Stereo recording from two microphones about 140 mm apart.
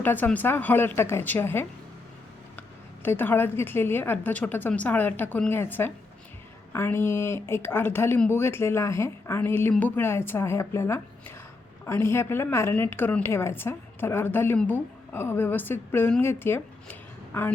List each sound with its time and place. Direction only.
0.0 s a woman's voice: 15° left (ahead or behind)
3.0 s a woman's voice: 15° left (ahead or behind)